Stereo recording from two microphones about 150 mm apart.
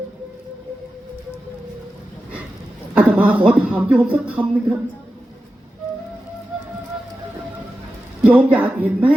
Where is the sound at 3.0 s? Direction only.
10° right (ahead or behind).